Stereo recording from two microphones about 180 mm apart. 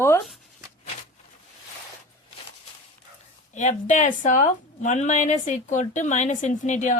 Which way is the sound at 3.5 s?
40° left (ahead or behind).